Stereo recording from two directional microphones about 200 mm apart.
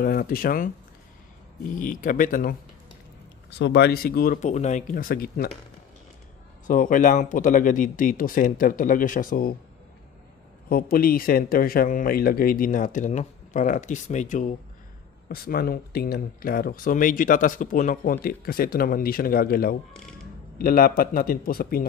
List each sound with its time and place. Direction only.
0.0 s speech: 45° left (ahead or behind)
1.8 s speech: 45° left (ahead or behind)
3.4 s speech: 60° left (ahead or behind)
6.7 s speech: 40° left (ahead or behind)
10.7 s speech: 45° left (ahead or behind)
15.2 s speech: 50° left (ahead or behind)